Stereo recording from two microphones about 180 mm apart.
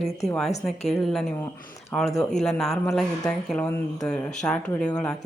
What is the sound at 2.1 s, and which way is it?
Speech, 5° left (ahead or behind).